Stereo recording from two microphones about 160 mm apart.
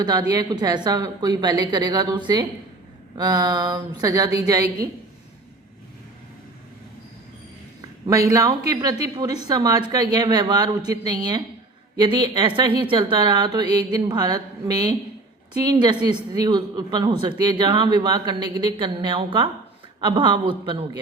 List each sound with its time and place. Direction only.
0.0 s speech: 25° right (ahead or behind)
7.8 s a man's voice: 20° right (ahead or behind)